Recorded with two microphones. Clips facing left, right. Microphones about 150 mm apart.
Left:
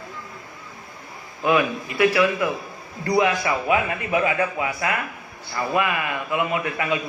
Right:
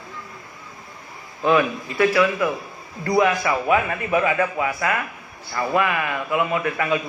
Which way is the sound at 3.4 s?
30° right (ahead or behind).